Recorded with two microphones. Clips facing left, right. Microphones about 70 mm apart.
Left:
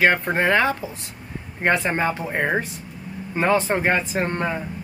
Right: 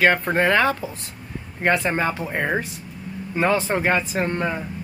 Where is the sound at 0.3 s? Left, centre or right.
Centre.